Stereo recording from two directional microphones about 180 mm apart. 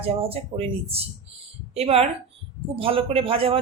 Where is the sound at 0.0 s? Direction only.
35° right (ahead or behind).